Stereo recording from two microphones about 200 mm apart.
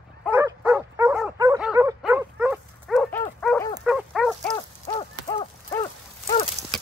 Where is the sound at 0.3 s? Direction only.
15° right (ahead or behind).